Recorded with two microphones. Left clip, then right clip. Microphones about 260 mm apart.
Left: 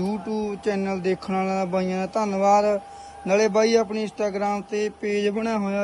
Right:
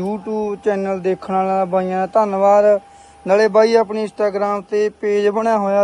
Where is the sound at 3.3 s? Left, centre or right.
Right.